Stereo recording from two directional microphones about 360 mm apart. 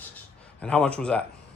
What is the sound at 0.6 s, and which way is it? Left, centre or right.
Speech, centre.